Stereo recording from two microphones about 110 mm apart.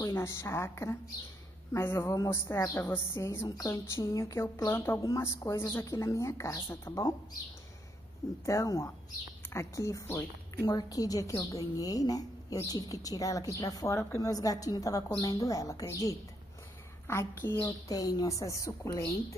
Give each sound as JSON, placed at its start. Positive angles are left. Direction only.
{"t": 0.1, "sound": "a woman's voice", "side_deg": 25}
{"t": 4.7, "sound": "a woman's voice", "side_deg": 20}
{"t": 8.5, "sound": "a woman's voice", "side_deg": 30}
{"t": 10.7, "sound": "a woman's voice", "side_deg": 35}
{"t": 17.8, "sound": "a woman's voice", "side_deg": 35}